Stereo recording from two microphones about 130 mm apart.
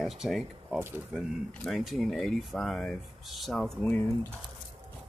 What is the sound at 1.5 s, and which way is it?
Speech, 5° left (ahead or behind).